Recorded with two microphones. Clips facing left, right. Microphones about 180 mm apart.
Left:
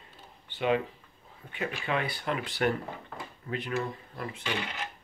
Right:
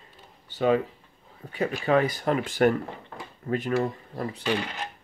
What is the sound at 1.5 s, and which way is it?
Speech, 40° right (ahead or behind).